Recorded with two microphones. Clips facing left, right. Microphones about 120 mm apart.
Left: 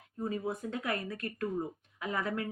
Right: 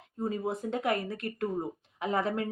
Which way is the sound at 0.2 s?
30° right (ahead or behind).